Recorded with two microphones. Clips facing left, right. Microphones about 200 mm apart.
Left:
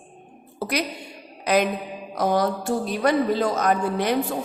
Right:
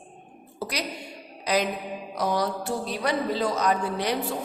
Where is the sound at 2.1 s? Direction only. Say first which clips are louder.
Left 5 dB; 50° left (ahead or behind).